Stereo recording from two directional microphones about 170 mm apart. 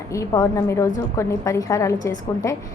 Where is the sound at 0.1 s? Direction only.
20° left (ahead or behind).